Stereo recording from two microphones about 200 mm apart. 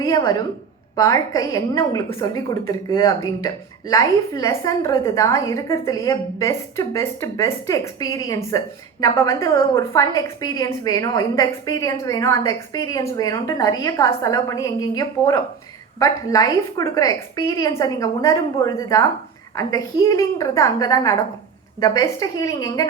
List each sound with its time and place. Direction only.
0.0 s a woman's voice: 15° left (ahead or behind)